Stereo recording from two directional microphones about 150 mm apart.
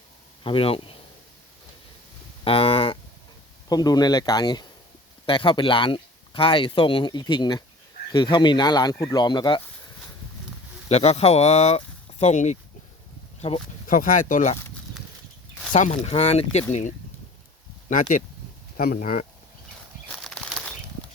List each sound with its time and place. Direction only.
0.4 s speech: 35° left (ahead or behind)
2.4 s speech: 40° left (ahead or behind)
3.7 s speech: 25° left (ahead or behind)
10.8 s speech: 45° left (ahead or behind)
13.8 s speech: 65° left (ahead or behind)
15.7 s speech: 50° left (ahead or behind)
18.8 s speech: 75° left (ahead or behind)
20.2 s bird flight: 5° left (ahead or behind)